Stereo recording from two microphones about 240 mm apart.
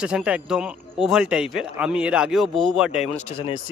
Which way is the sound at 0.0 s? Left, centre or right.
Centre.